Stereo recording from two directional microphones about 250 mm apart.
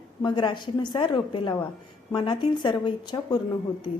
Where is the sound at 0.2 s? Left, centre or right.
Centre.